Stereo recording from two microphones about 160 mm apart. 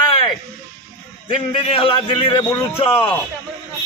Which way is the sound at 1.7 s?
35° left (ahead or behind).